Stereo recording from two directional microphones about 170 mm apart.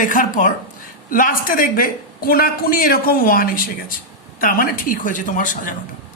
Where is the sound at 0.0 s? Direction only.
50° left (ahead or behind).